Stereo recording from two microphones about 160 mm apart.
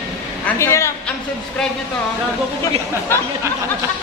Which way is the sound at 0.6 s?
15° left (ahead or behind).